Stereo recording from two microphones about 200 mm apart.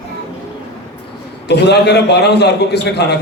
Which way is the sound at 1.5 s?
55° left (ahead or behind).